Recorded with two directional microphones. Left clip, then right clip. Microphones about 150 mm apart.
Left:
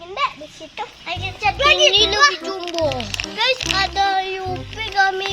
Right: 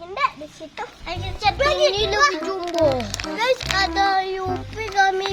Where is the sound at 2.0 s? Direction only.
15° right (ahead or behind).